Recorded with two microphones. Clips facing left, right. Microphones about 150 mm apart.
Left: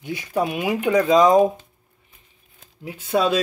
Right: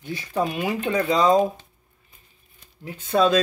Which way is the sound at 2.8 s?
10° left (ahead or behind).